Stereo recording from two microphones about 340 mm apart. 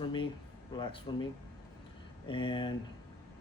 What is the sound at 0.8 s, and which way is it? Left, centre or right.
Speech, centre.